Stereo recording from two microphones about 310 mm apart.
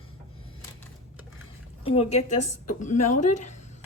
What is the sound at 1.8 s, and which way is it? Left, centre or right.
A woman's voice, centre.